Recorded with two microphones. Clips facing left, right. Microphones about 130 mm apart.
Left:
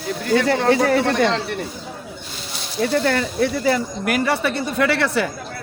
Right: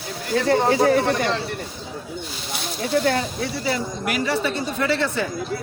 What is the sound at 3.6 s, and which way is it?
A man's voice, 55° left (ahead or behind).